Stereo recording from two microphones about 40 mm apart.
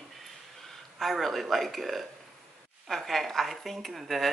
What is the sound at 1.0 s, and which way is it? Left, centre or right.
A woman's voice, centre.